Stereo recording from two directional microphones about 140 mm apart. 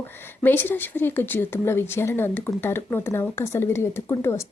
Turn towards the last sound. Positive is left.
turn(degrees=20)  # may be behind; listen again after turning